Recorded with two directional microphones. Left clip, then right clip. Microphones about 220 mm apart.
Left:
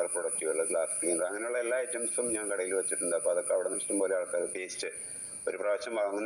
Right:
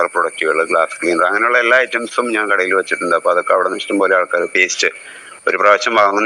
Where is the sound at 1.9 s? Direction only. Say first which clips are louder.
Right 17 dB; centre (ahead or behind).